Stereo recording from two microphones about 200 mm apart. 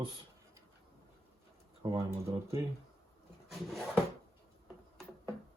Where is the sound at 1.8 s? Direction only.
20° right (ahead or behind).